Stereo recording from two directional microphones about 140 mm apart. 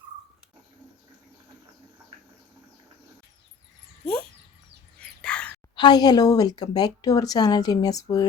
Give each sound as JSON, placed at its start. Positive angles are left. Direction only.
{"t": 4.0, "sound": "dog", "side_deg": 5}
{"t": 5.7, "sound": "speech", "side_deg": 30}